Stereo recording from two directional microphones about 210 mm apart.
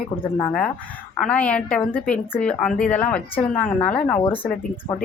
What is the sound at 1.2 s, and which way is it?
A woman's voice, 5° left (ahead or behind).